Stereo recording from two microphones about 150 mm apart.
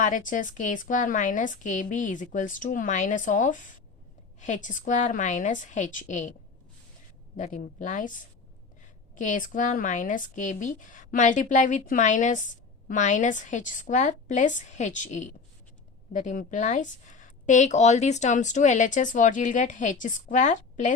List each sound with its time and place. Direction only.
0.0 s a woman's voice: 60° left (ahead or behind)
7.3 s a woman's voice: 60° left (ahead or behind)
9.1 s a woman's voice: 60° left (ahead or behind)